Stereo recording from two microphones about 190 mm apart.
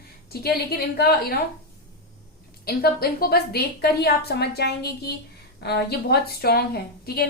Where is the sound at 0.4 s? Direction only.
55° left (ahead or behind).